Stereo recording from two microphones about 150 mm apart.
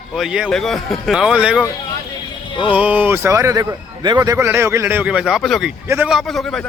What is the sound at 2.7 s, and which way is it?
A man's voice, 10° right (ahead or behind).